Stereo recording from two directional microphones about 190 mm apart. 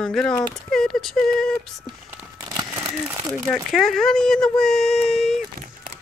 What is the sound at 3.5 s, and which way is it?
Speech, centre (ahead or behind).